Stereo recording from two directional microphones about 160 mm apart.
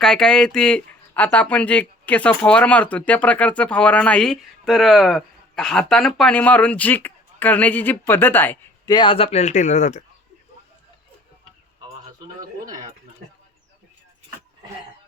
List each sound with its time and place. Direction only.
0.0 s speech: 5° left (ahead or behind)
8.9 s speech: 30° left (ahead or behind); by 10.0 s 45° left (ahead or behind)